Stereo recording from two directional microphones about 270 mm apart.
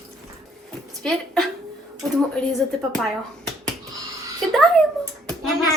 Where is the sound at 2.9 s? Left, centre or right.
Centre.